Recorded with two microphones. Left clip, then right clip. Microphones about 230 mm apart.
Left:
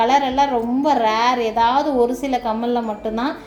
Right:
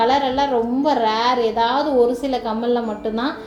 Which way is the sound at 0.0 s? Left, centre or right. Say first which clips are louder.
Left 1 dB; left.